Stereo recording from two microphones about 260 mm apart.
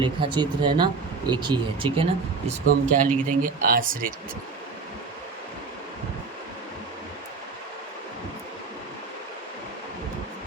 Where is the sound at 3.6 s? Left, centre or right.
Right.